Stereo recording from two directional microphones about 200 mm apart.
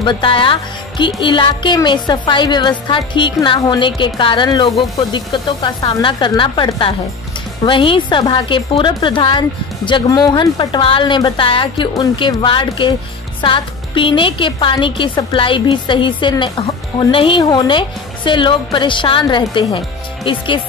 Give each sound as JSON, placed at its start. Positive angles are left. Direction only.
{"t": 0.0, "sound": "speech", "side_deg": 25}